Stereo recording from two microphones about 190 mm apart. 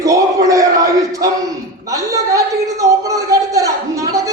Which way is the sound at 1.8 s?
15° right (ahead or behind).